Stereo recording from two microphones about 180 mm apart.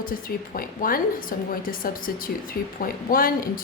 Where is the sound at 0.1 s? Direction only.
55° left (ahead or behind).